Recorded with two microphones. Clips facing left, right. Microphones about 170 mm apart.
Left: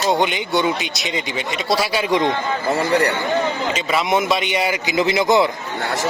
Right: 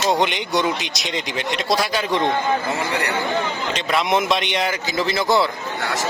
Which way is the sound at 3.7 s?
5° left (ahead or behind).